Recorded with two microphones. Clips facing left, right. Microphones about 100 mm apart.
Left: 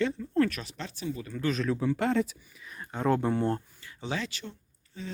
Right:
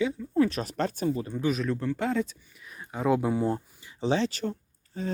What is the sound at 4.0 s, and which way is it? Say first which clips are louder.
Speech: right 8 dB; 30° right (ahead or behind).